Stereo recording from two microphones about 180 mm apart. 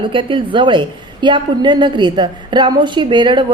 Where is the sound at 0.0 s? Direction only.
30° right (ahead or behind).